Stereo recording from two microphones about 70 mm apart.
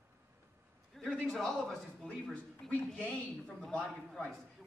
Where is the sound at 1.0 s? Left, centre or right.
Centre.